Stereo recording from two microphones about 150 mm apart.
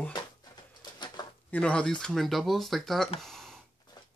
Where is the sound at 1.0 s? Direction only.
30° left (ahead or behind).